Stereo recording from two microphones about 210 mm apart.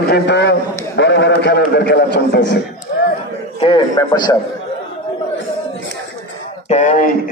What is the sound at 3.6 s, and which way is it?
Speech, 25° left (ahead or behind).